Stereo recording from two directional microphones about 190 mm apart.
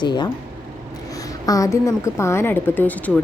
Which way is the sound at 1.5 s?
15° left (ahead or behind).